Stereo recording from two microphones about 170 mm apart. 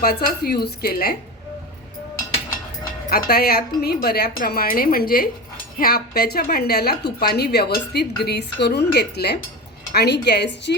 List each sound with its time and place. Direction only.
0.0 s a woman's voice: 65° left (ahead or behind)
3.1 s a woman's voice: 60° left (ahead or behind); by 10.8 s 90° left